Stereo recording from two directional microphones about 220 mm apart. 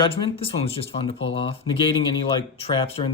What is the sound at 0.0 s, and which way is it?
Speech, 25° left (ahead or behind).